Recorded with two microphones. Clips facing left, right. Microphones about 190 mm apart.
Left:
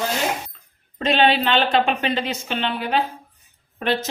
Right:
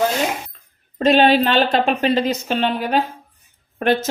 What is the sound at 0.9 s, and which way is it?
A woman's voice, 45° right (ahead or behind).